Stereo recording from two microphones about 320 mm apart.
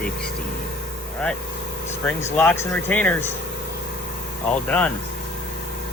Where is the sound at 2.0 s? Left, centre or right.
Centre.